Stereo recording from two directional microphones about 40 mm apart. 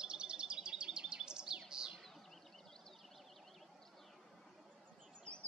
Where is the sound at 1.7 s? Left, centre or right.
Centre.